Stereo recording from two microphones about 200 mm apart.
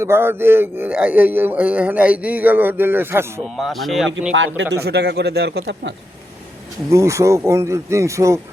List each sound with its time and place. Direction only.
0.0 s a man's voice: 10° right (ahead or behind)
3.4 s speech: centre (ahead or behind)
4.4 s a man's voice: 65° right (ahead or behind)
6.9 s a man's voice: 15° right (ahead or behind)